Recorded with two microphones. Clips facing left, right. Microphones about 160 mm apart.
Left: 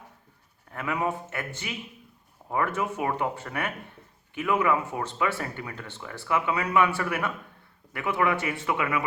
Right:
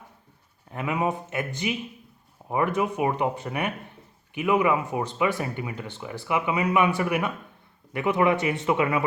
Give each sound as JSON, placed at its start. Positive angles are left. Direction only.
{"t": 0.7, "sound": "speech", "side_deg": -20}